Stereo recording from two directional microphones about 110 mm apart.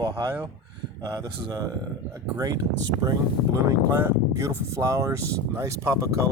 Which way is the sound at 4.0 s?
30° right (ahead or behind).